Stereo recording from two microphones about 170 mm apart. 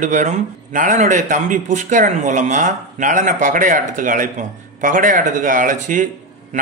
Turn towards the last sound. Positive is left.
turn(degrees=-45)  # may be behind; listen again after turning